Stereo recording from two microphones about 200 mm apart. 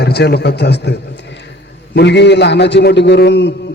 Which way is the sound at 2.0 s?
60° left (ahead or behind).